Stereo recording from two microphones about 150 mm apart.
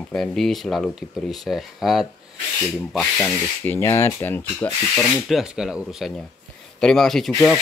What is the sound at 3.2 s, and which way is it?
Speech, 10° left (ahead or behind).